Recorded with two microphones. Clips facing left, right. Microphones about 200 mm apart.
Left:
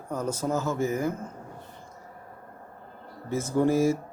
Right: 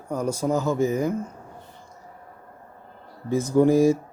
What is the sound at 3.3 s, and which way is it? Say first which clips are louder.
Speech: right 5 dB; 15° right (ahead or behind).